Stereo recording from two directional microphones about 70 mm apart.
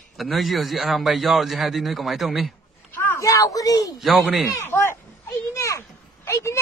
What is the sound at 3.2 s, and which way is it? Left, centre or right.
Speech, left.